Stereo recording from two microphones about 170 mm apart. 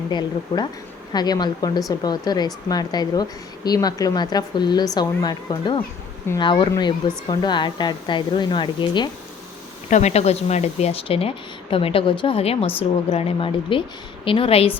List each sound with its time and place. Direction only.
0.1 s a woman's voice: 25° left (ahead or behind)
9.9 s speech: 40° left (ahead or behind)